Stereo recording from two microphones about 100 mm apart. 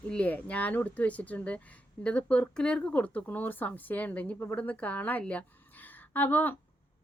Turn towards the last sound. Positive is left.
turn(degrees=20)  # may be behind; listen again after turning